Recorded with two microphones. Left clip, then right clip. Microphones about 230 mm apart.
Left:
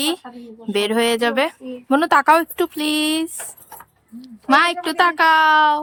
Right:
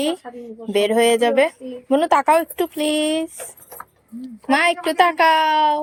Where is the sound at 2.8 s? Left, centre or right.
Centre.